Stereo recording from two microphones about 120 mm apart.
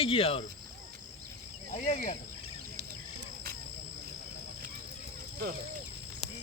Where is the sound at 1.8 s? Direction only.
70° left (ahead or behind).